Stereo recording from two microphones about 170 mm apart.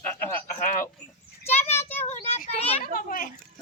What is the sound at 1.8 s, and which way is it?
Child singing, 40° left (ahead or behind).